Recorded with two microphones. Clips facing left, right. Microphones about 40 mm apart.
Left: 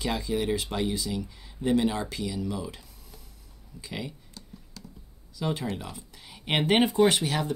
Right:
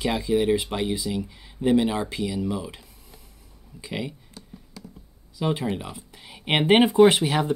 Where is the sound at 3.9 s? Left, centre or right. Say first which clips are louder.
Right 5 dB; centre.